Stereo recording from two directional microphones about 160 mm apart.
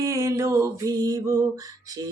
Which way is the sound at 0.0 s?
15° right (ahead or behind).